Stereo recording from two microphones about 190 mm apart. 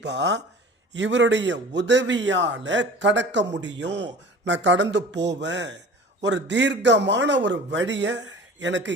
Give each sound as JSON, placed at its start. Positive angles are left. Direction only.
{"t": 0.0, "sound": "a man's voice", "side_deg": -65}